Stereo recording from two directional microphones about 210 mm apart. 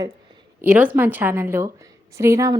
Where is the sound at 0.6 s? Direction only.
5° right (ahead or behind).